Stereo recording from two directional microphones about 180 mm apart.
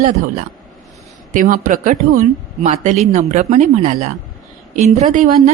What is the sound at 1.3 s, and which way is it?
A woman's voice, 45° right (ahead or behind).